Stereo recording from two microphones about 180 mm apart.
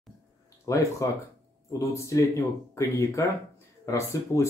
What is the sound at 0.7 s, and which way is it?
Speech, 15° left (ahead or behind).